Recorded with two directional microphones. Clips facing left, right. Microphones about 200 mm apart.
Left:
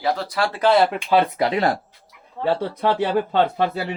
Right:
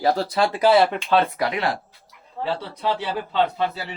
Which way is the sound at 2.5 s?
50° left (ahead or behind).